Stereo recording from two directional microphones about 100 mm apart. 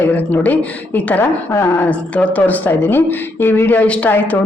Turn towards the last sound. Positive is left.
turn(degrees=15)  # may be behind; listen again after turning